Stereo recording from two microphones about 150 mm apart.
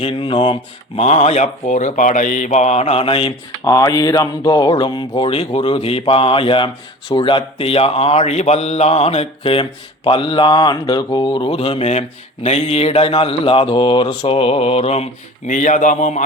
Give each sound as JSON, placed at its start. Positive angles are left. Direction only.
{"t": 0.0, "sound": "speech", "side_deg": 35}
{"t": 3.6, "sound": "speech", "side_deg": 25}